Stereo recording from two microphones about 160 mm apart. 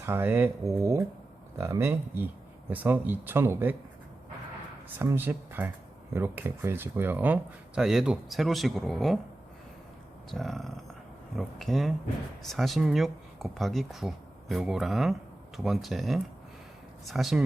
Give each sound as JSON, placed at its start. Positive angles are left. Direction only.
{"t": 0.0, "sound": "speech", "side_deg": -15}
{"t": 4.9, "sound": "speech", "side_deg": -15}
{"t": 10.3, "sound": "speech", "side_deg": 0}